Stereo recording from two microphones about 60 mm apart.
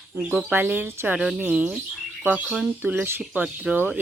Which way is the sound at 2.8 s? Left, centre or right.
Right.